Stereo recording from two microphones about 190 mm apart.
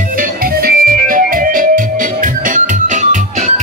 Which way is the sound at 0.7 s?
50° right (ahead or behind).